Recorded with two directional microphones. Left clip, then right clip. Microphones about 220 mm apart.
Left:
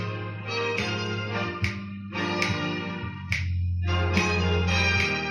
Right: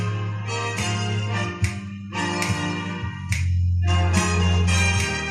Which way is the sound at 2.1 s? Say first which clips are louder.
Right 2 dB; 50° right (ahead or behind).